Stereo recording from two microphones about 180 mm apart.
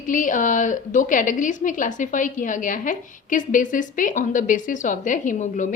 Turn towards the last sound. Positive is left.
turn(degrees=45)  # may be behind; listen again after turning